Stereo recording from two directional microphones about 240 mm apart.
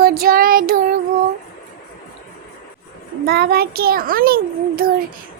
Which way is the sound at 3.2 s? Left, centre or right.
Right.